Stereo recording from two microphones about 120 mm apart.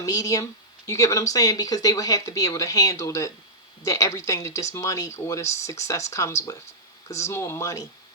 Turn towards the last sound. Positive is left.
turn(degrees=25)  # may be behind; listen again after turning